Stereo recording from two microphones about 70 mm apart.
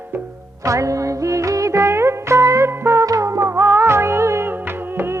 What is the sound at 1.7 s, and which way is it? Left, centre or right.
Music, right.